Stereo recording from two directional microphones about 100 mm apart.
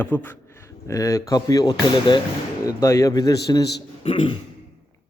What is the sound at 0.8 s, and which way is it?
Speech, 35° left (ahead or behind).